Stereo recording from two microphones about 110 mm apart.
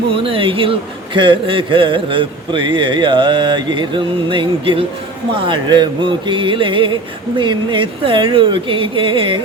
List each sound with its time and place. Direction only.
0.1 s a man's voice: 55° right (ahead or behind)